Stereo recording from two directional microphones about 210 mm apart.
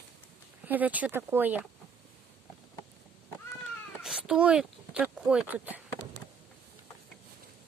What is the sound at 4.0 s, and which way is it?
Speech, 5° right (ahead or behind).